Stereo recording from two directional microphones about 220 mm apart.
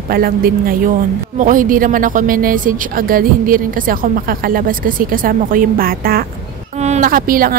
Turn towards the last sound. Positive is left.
turn(degrees=-40)  # may be behind; listen again after turning